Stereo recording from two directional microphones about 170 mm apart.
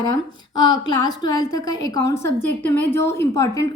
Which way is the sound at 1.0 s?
20° left (ahead or behind).